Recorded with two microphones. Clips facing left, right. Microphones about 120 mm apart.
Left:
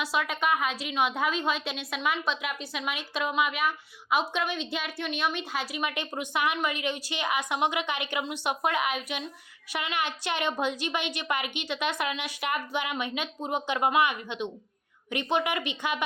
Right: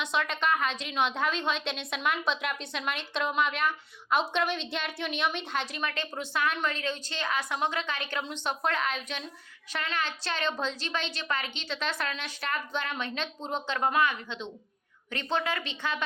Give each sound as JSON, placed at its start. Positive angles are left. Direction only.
{"t": 0.0, "sound": "a woman's voice", "side_deg": 5}